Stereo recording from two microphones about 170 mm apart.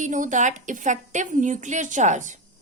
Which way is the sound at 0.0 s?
50° right (ahead or behind).